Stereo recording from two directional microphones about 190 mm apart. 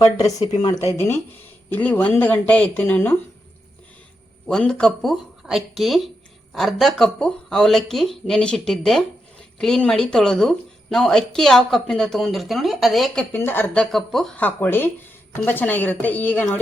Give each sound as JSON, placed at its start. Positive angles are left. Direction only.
{"t": 0.0, "sound": "speech", "side_deg": 20}
{"t": 4.4, "sound": "speech", "side_deg": 5}